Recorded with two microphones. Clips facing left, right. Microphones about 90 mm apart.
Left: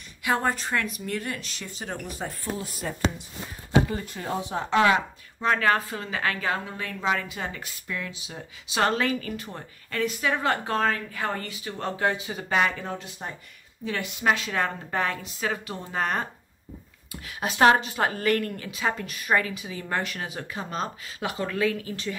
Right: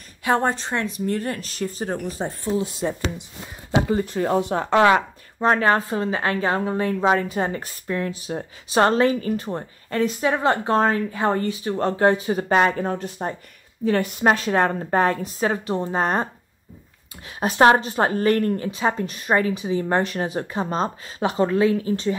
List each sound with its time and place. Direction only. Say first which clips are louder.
0.2 s speech: right 5 dB; 35° right (ahead or behind)
4.2 s speech: right 7 dB; 65° right (ahead or behind); by 16.3 s 30° right (ahead or behind)
17.4 s speech: right 4 dB; 35° right (ahead or behind)